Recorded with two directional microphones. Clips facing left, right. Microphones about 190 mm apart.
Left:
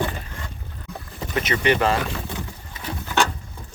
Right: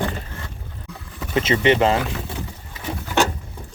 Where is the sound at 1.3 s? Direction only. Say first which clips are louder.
Right 4 dB; 25° right (ahead or behind).